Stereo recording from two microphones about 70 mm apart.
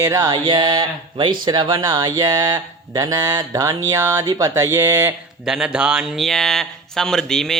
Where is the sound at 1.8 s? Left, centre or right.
Right.